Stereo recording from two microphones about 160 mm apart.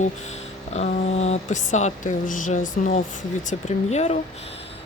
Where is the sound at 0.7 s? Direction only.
45° left (ahead or behind).